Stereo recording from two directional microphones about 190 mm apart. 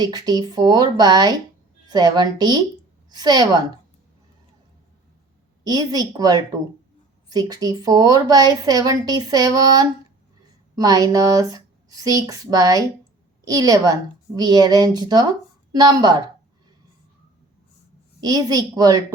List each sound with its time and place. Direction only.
0.0 s a woman's voice: 20° right (ahead or behind)
5.6 s a woman's voice: 20° right (ahead or behind)
18.2 s a woman's voice: 20° right (ahead or behind)